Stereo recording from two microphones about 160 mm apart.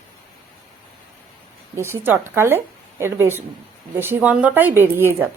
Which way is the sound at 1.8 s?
15° right (ahead or behind).